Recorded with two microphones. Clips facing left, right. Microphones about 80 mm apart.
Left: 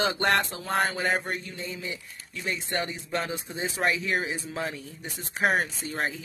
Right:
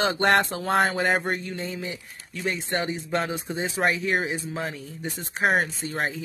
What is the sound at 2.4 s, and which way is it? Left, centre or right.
Speech, right.